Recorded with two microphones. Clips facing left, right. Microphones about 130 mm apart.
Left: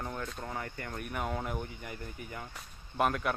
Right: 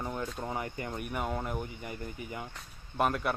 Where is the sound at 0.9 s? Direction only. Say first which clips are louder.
Even; 5° right (ahead or behind).